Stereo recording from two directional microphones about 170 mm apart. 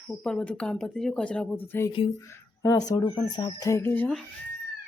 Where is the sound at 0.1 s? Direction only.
5° left (ahead or behind).